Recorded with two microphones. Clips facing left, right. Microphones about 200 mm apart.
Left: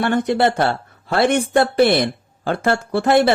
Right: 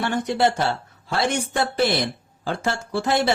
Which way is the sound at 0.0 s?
55° left (ahead or behind).